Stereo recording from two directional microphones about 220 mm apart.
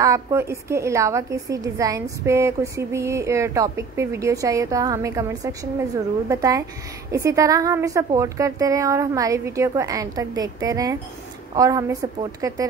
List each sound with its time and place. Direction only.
0.0 s a woman's voice: 15° right (ahead or behind)